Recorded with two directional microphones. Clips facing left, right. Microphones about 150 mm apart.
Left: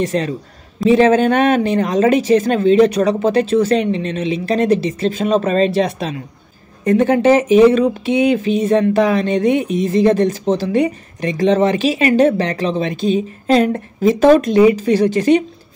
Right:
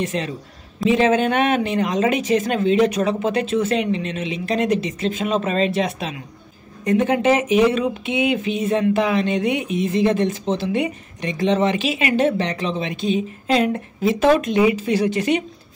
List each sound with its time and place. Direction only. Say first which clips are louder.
0.0 s speech: left 6 dB; 40° left (ahead or behind)